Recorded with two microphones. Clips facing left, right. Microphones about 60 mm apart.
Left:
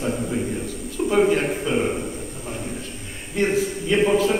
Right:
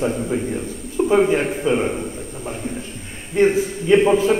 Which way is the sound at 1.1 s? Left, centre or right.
Centre.